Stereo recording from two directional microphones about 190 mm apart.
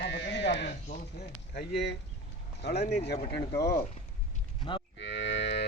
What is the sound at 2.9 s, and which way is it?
Speech, 60° left (ahead or behind).